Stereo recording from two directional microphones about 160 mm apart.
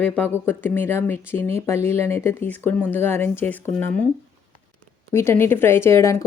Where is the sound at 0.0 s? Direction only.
10° left (ahead or behind).